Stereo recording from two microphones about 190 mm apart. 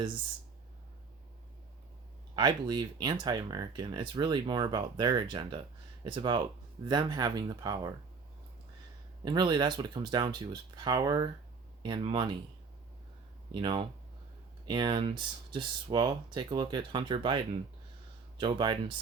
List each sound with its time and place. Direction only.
2.3 s speech: 20° right (ahead or behind)
9.2 s speech: 20° right (ahead or behind)
13.5 s speech: 25° right (ahead or behind)